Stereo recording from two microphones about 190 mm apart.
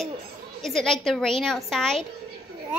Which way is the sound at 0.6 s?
5° left (ahead or behind).